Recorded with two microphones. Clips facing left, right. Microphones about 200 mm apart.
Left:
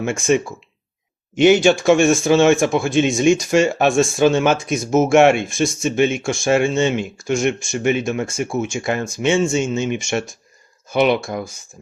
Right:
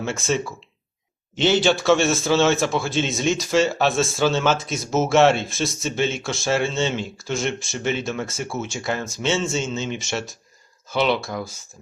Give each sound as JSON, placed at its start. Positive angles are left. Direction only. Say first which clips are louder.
{"t": 0.0, "sound": "speech", "louder": "left 6 dB", "side_deg": 15}